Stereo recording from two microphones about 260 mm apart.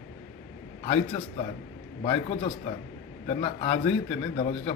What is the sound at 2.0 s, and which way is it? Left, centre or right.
A man's voice, left.